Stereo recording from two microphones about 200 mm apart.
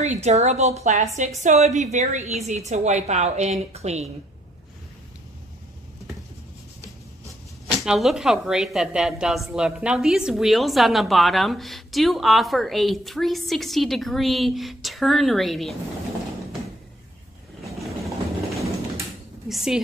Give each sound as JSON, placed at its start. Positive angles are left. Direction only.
{"t": 0.0, "sound": "a woman's voice", "side_deg": -35}
{"t": 7.8, "sound": "a woman's voice", "side_deg": 0}
{"t": 17.7, "sound": "train", "side_deg": 0}
{"t": 19.5, "sound": "a woman's voice", "side_deg": -5}